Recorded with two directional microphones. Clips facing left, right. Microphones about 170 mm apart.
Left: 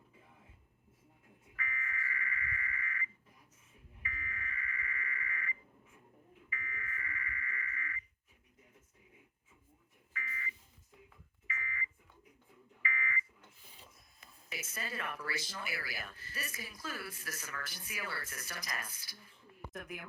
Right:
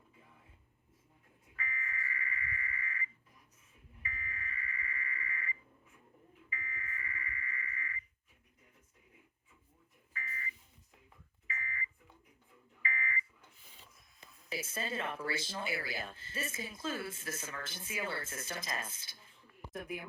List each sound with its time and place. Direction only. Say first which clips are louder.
1.5 s a sound: even; 30° right (ahead or behind)
6.5 s music: even; 25° right (ahead or behind)
10.1 s buzzer: even; 35° right (ahead or behind)
11.4 s smoke detector: even; 35° right (ahead or behind)
12.8 s fire alarm: even; 35° right (ahead or behind)
14.2 s speech: right 6 dB; 30° right (ahead or behind)